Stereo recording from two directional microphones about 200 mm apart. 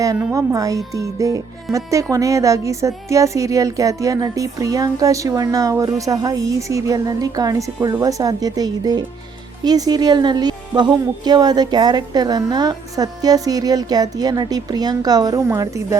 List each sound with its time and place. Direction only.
0.2 s speech: 15° right (ahead or behind)